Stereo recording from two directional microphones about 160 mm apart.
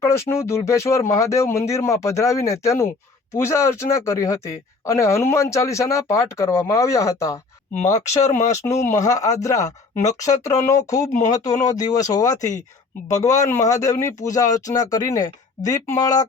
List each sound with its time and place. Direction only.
0.0 s speech: 15° left (ahead or behind)